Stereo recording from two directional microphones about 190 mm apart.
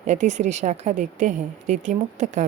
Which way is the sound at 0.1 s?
40° right (ahead or behind).